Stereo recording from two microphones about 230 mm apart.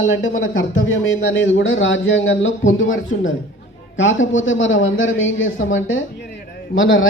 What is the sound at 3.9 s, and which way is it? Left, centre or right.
A man's voice, left.